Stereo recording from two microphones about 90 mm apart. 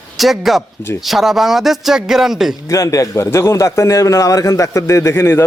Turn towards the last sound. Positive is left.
turn(degrees=25)  # may be behind; listen again after turning